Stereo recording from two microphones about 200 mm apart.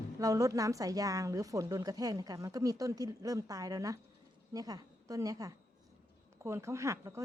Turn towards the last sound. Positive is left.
turn(degrees=-15)  # may be behind; listen again after turning